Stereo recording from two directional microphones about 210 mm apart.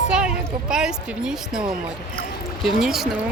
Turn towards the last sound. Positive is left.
turn(degrees=0)  # may be behind; listen again after turning